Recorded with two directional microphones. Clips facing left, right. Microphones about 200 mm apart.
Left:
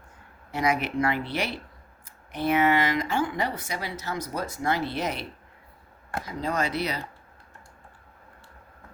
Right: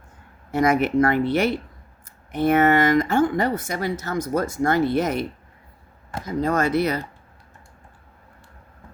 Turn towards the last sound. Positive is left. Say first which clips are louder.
# right 7 dB
turn(degrees=-50)  # may be behind; listen again after turning